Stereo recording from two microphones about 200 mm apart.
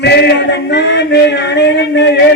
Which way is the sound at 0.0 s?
55° left (ahead or behind).